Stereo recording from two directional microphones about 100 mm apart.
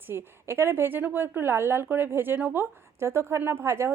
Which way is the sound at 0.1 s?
25° right (ahead or behind).